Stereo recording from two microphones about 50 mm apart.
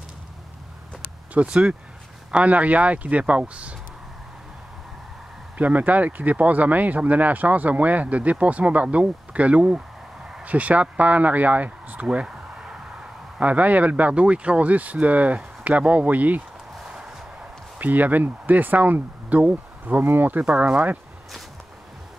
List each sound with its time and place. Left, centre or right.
1.3 s speech: right
5.6 s speech: right
9.7 s a sound: centre
10.4 s speech: right
12.1 s a sound: centre
13.4 s speech: right
17.7 s speech: right
19.2 s a sound: right
20.0 s speech: right
20.4 s speech: right